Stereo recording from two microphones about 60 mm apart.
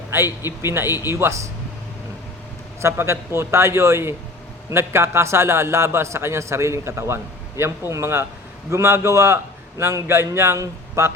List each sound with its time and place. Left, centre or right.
0.1 s a man's voice: right
2.8 s a man's voice: right